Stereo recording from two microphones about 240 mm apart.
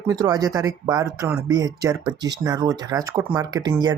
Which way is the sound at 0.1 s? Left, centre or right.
Centre.